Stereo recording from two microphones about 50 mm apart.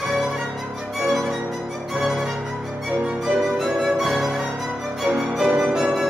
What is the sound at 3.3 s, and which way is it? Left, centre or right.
Music, centre.